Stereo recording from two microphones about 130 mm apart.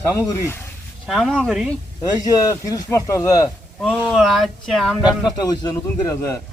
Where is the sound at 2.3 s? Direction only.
25° left (ahead or behind).